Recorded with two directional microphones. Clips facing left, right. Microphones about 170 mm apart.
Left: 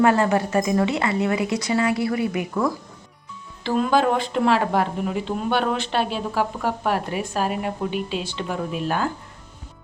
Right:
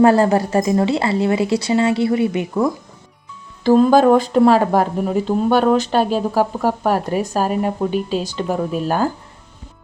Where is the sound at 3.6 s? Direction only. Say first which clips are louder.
Right 8 dB; 40° right (ahead or behind).